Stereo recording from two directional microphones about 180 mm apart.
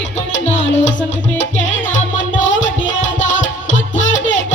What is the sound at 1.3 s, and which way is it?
Music, 90° left.